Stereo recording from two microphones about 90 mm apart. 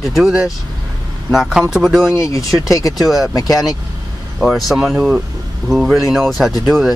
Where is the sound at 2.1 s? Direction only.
35° left (ahead or behind).